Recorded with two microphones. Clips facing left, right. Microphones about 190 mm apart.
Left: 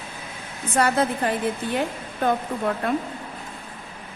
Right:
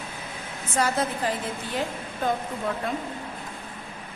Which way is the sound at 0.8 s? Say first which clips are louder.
Left 4 dB; 60° left (ahead or behind).